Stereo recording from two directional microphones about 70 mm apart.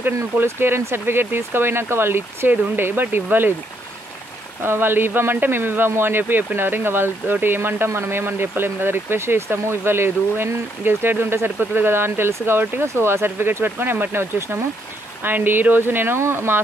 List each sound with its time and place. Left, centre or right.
0.0 s speech: right
4.6 s speech: right